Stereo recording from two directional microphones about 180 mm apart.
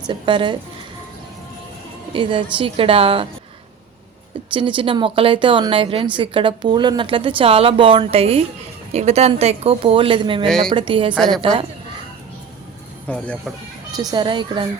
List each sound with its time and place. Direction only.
0.1 s a woman's voice: 25° right (ahead or behind)
2.1 s a woman's voice: 30° right (ahead or behind)
4.5 s a woman's voice: 25° right (ahead or behind)
10.4 s a woman's voice: centre (ahead or behind)
10.7 s a woman's voice: 30° right (ahead or behind)
11.1 s a woman's voice: centre (ahead or behind)
13.1 s speech: 5° left (ahead or behind)
13.9 s a woman's voice: 20° right (ahead or behind)